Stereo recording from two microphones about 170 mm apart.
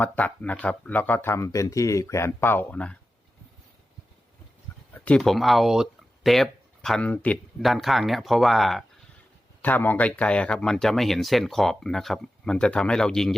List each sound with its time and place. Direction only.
0.0 s speech: 10° left (ahead or behind)
4.9 s speech: 5° left (ahead or behind)